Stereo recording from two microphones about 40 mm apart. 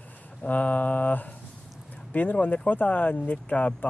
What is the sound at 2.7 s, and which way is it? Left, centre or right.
Speech, left.